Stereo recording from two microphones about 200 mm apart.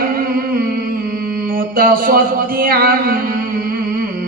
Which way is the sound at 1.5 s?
45° right (ahead or behind).